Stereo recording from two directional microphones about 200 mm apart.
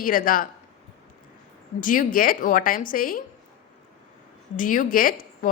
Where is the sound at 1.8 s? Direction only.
40° left (ahead or behind).